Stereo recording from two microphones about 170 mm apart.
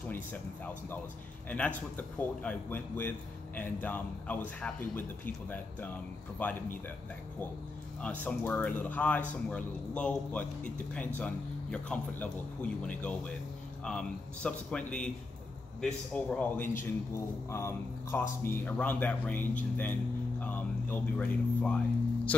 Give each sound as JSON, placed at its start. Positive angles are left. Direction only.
{"t": 2.0, "sound": "a man's voice", "side_deg": 10}
{"t": 8.0, "sound": "a man's voice", "side_deg": 10}